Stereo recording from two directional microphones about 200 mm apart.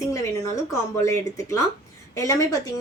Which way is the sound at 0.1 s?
15° left (ahead or behind).